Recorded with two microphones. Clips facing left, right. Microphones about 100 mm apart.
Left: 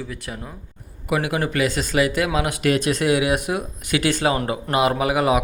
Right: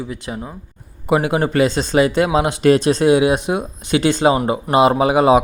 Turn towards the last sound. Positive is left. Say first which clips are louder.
# right 6 dB
turn(degrees=-25)  # may be behind; listen again after turning